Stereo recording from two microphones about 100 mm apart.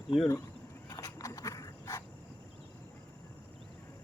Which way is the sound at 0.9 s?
35° left (ahead or behind).